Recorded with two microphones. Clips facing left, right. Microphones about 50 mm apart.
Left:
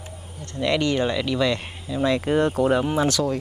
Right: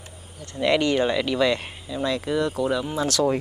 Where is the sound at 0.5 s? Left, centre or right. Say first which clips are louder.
Right 1 dB; centre.